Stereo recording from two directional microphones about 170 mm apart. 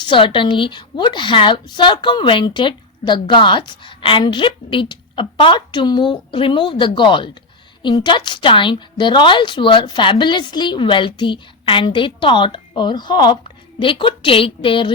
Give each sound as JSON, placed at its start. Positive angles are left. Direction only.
{"t": 0.0, "sound": "a woman's voice", "side_deg": 30}